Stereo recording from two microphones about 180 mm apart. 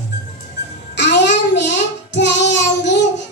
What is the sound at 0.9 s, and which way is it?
Child singing, 75° left (ahead or behind).